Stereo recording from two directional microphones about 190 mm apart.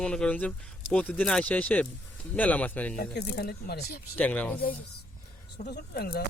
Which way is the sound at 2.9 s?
55° left (ahead or behind).